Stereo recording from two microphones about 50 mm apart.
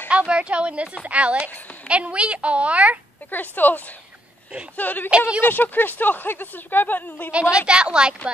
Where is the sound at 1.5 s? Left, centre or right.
Left.